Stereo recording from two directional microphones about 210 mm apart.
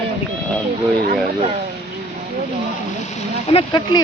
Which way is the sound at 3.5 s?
20° left (ahead or behind).